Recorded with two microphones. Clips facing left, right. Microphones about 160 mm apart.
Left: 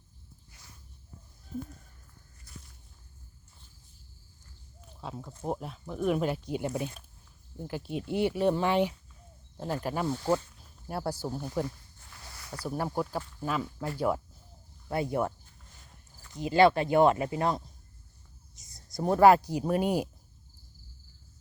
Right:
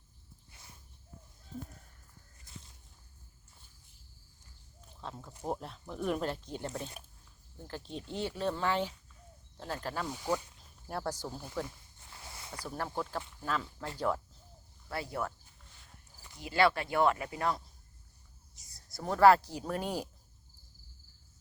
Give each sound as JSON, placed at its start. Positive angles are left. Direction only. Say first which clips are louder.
{"t": 0.5, "sound": "a sound", "louder": "right 1 dB", "side_deg": -25}
{"t": 2.4, "sound": "walk", "louder": "left 2 dB", "side_deg": -20}
{"t": 4.9, "sound": "speech", "louder": "left 4 dB", "side_deg": 5}
{"t": 10.1, "sound": "speech", "louder": "left 7 dB", "side_deg": -15}
{"t": 10.8, "sound": "speech", "louder": "left 4 dB", "side_deg": 5}
{"t": 12.1, "sound": "a sound", "louder": "left 2 dB", "side_deg": -25}
{"t": 12.6, "sound": "speech", "louder": "left 6 dB", "side_deg": 15}
{"t": 16.3, "sound": "speech", "louder": "left 6 dB", "side_deg": 20}